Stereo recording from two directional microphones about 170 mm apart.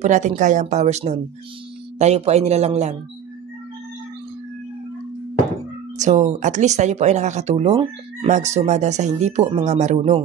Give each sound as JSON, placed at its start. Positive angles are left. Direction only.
{"t": 0.0, "sound": "speech", "side_deg": -45}
{"t": 5.9, "sound": "speech", "side_deg": -45}